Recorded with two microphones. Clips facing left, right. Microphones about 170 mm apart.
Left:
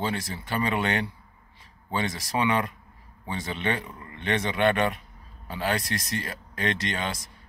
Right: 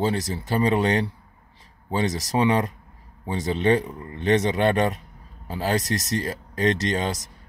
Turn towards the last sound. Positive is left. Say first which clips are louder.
# right 6 dB
turn(degrees=-40)  # may be behind; listen again after turning